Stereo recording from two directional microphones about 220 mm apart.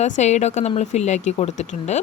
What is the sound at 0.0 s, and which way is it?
Speech, 30° left (ahead or behind).